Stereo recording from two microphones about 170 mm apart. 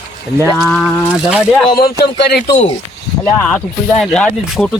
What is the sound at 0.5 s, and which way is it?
Speech, 5° left (ahead or behind).